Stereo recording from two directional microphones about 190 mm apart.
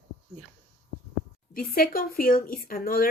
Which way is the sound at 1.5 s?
50° left (ahead or behind).